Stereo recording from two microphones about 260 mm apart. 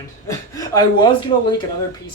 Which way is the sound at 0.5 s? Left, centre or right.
Centre.